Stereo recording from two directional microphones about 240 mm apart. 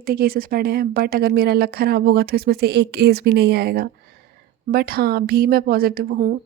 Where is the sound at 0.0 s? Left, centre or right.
Right.